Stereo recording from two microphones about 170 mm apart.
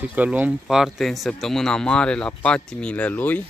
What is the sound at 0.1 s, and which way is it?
Speech, 10° right (ahead or behind).